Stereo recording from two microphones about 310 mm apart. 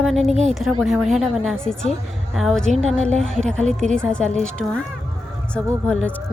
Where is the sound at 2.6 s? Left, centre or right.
Right.